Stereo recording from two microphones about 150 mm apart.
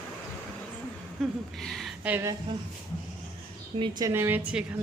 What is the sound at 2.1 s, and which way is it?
Speech, 15° right (ahead or behind).